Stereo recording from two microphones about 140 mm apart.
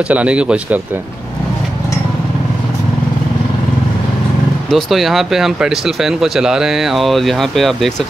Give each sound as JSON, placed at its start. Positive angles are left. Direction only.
{"t": 0.1, "sound": "speech", "side_deg": -10}
{"t": 4.6, "sound": "speech", "side_deg": 0}